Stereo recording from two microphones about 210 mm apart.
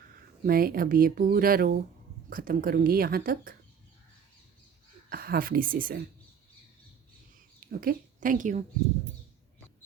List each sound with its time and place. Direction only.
0.4 s speech: 45° right (ahead or behind)
5.0 s speech: 45° right (ahead or behind)
7.6 s speech: 45° right (ahead or behind)